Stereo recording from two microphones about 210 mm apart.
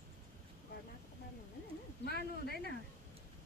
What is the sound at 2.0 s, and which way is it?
Speech, 50° left (ahead or behind).